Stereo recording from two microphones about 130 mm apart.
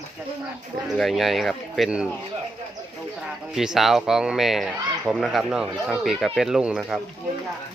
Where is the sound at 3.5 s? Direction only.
5° right (ahead or behind).